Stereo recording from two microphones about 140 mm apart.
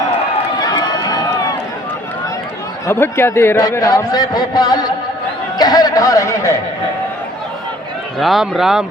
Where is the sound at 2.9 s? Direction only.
15° left (ahead or behind).